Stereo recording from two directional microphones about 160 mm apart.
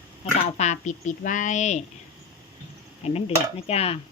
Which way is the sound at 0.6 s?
45° left (ahead or behind).